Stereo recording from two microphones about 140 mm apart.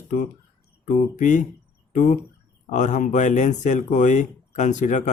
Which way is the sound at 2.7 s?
60° left (ahead or behind).